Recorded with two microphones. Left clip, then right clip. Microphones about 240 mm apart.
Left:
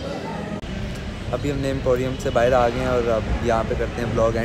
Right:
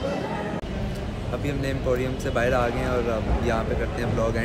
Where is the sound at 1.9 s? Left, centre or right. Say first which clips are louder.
Left 5 dB; centre.